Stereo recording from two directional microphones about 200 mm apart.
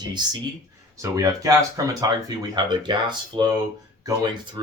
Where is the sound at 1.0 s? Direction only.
15° right (ahead or behind).